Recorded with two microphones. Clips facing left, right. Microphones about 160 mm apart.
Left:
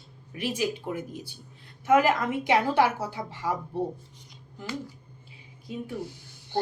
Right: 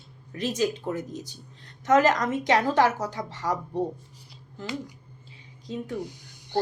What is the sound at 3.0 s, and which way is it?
Speech, 45° right (ahead or behind).